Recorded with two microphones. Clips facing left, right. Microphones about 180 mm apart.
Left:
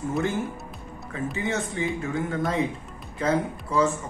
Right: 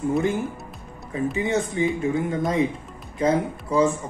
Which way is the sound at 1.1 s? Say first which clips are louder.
Right 5 dB; 25° right (ahead or behind).